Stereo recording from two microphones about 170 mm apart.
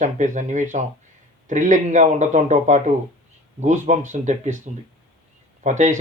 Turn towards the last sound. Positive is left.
turn(degrees=-45)  # may be behind; listen again after turning